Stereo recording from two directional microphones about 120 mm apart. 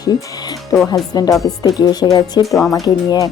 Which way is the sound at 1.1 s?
30° left (ahead or behind).